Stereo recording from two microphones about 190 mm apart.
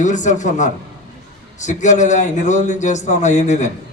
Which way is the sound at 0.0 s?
40° left (ahead or behind).